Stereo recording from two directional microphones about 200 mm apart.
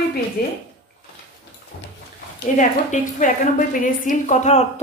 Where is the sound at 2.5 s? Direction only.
40° left (ahead or behind).